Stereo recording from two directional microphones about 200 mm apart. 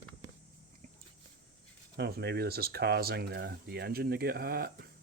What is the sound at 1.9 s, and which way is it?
Speech, 55° right (ahead or behind).